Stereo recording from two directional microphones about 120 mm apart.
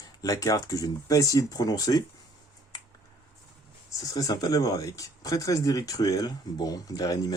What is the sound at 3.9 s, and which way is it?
Speech, 30° left (ahead or behind).